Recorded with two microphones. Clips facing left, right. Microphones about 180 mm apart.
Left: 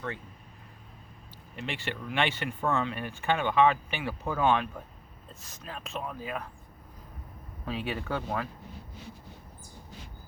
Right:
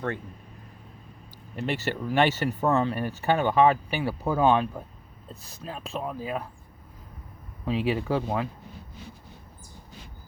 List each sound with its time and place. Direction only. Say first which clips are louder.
1.5 s speech: right 7 dB; 40° right (ahead or behind)
7.6 s speech: right 7 dB; 25° right (ahead or behind)